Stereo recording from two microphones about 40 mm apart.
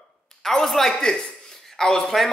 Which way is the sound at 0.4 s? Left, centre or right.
Centre.